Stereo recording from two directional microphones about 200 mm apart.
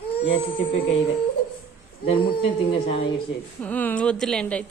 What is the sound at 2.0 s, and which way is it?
Speech, 30° left (ahead or behind).